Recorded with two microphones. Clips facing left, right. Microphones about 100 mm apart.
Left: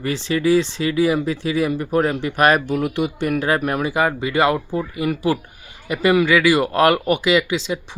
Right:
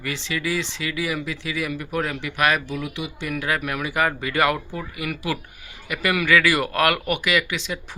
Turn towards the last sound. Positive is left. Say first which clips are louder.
# left 6 dB
turn(degrees=25)  # may be behind; listen again after turning